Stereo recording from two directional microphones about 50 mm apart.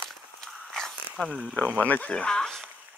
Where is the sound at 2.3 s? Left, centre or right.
Centre.